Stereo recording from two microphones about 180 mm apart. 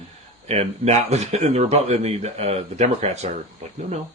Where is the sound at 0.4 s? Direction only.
35° right (ahead or behind).